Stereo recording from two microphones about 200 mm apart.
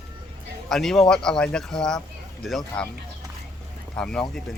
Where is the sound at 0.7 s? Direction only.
Centre (ahead or behind).